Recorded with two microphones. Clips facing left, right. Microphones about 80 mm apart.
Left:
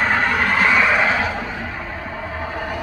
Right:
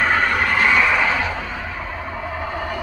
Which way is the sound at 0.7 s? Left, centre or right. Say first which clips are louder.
Left 1 dB; centre.